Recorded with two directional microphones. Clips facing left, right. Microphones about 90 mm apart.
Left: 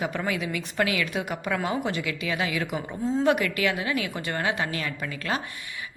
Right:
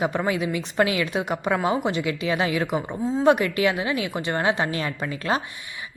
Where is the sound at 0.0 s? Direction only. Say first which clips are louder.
Right 5 dB; 25° right (ahead or behind).